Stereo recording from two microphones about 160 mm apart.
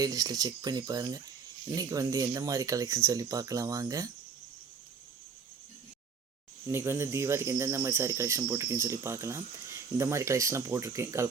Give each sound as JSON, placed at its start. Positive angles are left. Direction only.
{"t": 0.0, "sound": "speech", "side_deg": -25}
{"t": 6.7, "sound": "cricket", "side_deg": -15}